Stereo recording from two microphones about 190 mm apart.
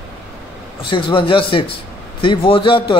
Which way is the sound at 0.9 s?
25° left (ahead or behind).